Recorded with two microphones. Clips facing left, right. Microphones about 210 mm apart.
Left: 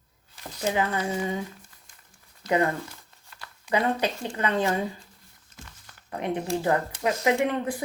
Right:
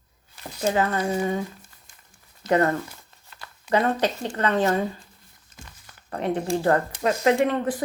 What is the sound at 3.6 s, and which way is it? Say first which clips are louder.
Speech: right 3 dB; 45° right (ahead or behind).